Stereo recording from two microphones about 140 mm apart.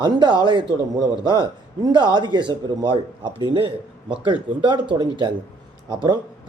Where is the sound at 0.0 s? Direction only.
35° right (ahead or behind).